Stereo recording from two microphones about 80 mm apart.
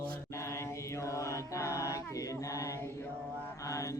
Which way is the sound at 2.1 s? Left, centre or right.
Left.